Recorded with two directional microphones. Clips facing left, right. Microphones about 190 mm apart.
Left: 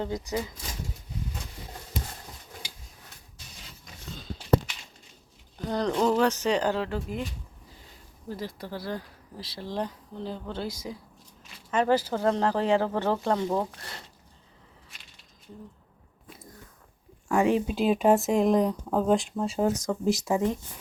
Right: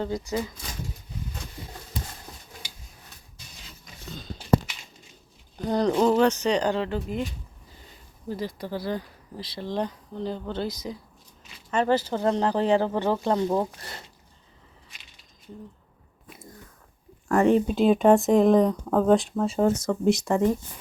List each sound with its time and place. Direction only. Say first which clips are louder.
0.0 s speech: right 2 dB; 15° left (ahead or behind)
5.6 s speech: right 4 dB; 15° right (ahead or behind)
6.1 s speech: right 3 dB; 5° left (ahead or behind)
8.3 s speech: right 4 dB; centre (ahead or behind)
17.2 s speech: right 4 dB; centre (ahead or behind)